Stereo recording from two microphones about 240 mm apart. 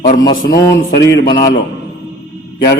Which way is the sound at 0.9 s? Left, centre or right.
Left.